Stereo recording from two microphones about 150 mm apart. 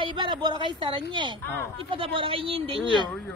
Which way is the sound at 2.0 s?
35° right (ahead or behind).